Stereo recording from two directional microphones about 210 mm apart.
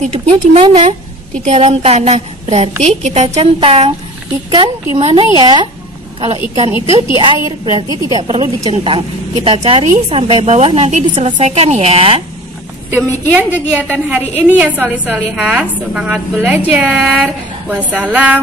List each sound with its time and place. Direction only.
0.3 s a woman's voice: 30° right (ahead or behind)
12.9 s a woman's voice: 10° right (ahead or behind)